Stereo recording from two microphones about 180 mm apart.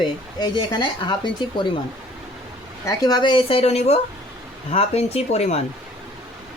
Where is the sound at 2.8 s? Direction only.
20° left (ahead or behind).